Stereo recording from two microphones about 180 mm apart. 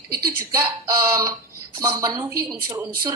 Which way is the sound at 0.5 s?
20° right (ahead or behind).